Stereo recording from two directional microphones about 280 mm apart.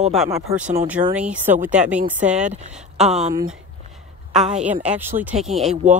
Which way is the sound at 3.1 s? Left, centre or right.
Right.